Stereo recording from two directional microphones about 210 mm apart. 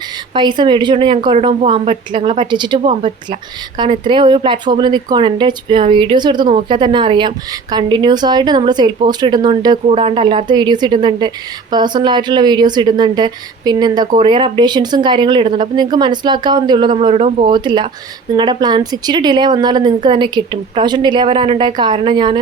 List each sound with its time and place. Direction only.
0.3 s speech: 20° right (ahead or behind)